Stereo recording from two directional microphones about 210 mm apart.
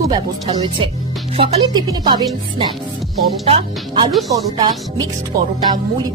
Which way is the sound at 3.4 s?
25° right (ahead or behind).